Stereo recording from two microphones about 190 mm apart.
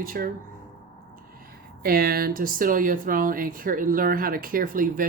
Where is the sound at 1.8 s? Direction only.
50° right (ahead or behind).